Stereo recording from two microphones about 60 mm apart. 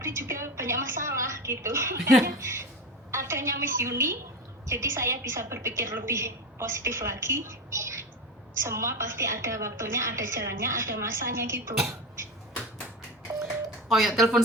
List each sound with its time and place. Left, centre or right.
0.0 s a woman's voice: right
13.8 s speech: centre